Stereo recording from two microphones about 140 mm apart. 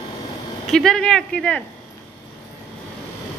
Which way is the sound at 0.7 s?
5° left (ahead or behind).